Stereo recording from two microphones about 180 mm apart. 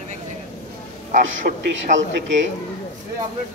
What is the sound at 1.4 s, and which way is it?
Speech, 50° right (ahead or behind).